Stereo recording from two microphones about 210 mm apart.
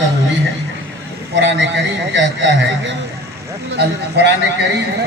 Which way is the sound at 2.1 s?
60° right (ahead or behind).